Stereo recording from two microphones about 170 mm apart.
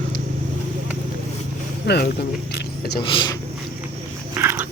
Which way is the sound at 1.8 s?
70° left (ahead or behind).